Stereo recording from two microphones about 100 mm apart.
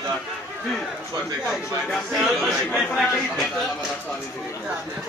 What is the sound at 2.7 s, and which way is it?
Speech, 5° left (ahead or behind).